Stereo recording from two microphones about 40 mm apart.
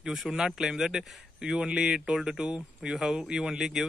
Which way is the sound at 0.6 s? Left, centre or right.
Centre.